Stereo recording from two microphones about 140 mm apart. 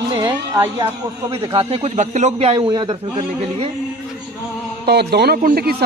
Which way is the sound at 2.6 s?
30° right (ahead or behind).